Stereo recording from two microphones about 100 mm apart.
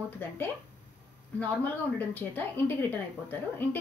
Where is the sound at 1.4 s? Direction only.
15° left (ahead or behind).